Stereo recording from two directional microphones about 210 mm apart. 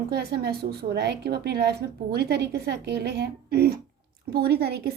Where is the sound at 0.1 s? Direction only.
50° right (ahead or behind).